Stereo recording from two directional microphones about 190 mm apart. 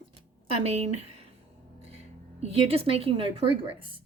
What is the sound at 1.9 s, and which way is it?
Speech, 30° right (ahead or behind).